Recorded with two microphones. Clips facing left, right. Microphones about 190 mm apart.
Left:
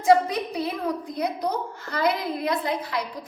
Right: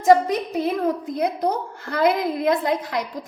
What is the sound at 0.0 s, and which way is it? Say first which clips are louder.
A woman's voice: right 3 dB; 45° right (ahead or behind).